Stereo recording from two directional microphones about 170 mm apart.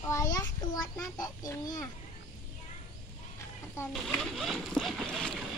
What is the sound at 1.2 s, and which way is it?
Speech, 20° left (ahead or behind).